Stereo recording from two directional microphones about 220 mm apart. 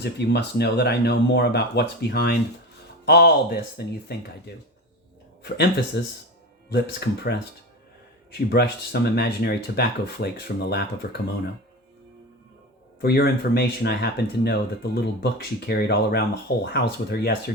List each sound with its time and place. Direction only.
0.0 s speech: 50° left (ahead or behind)
13.0 s speech: 45° left (ahead or behind)